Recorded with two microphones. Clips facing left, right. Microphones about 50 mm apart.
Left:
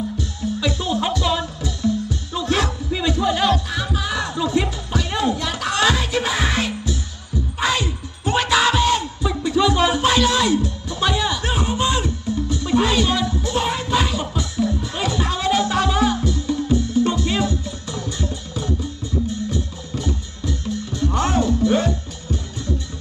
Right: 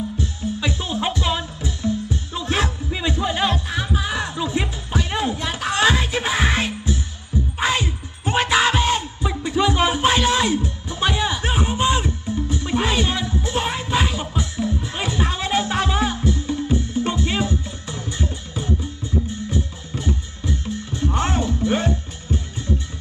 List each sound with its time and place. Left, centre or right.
0.2 s music: right